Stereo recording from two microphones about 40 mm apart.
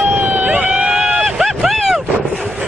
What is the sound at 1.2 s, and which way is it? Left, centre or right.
Vehicle, centre.